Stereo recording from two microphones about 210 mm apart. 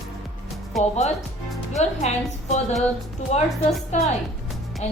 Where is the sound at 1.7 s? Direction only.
30° left (ahead or behind).